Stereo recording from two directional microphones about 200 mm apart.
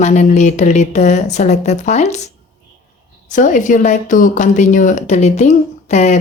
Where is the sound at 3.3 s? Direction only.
40° left (ahead or behind).